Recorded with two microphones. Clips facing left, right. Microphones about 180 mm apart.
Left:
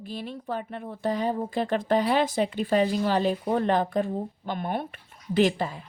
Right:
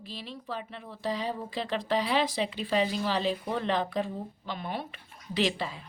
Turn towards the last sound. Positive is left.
turn(degrees=50)  # may be behind; listen again after turning